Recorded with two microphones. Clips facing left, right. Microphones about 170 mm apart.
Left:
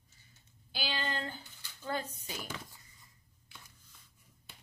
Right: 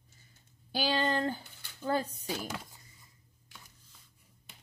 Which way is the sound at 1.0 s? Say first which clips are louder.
Right 8 dB; 50° right (ahead or behind).